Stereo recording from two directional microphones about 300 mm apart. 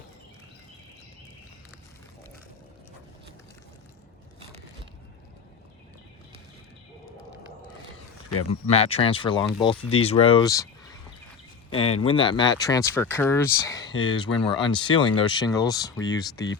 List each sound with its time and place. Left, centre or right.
8.6 s speech: left
11.9 s speech: centre